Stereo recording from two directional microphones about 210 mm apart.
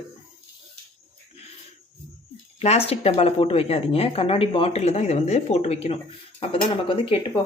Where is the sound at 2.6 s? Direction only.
30° left (ahead or behind).